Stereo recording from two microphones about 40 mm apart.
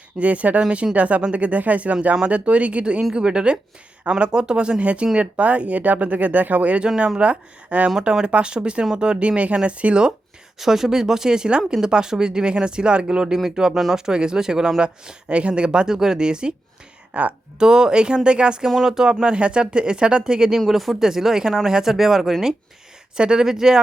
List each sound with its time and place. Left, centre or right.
0.2 s speech: right
6.8 s speech: right
7.2 s speech: right
7.9 s speech: centre
10.6 s speech: centre
14.8 s speech: right
17.1 s speech: right
17.6 s speech: centre
18.7 s speech: centre
19.2 s speech: right
20.6 s speech: centre
23.1 s speech: right